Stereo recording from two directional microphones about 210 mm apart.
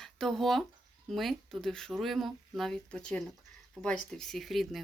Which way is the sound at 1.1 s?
Centre (ahead or behind).